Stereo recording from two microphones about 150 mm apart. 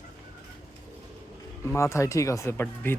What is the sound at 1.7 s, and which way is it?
Speech, 20° left (ahead or behind).